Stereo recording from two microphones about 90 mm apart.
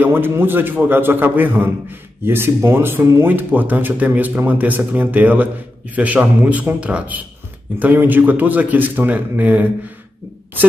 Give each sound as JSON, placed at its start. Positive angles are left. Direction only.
{"t": 0.0, "sound": "a man's voice", "side_deg": -25}